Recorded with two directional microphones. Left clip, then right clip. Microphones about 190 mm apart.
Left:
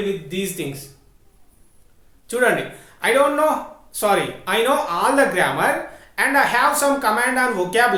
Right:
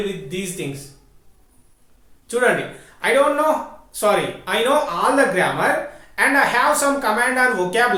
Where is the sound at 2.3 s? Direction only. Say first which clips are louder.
Even; 30° left (ahead or behind).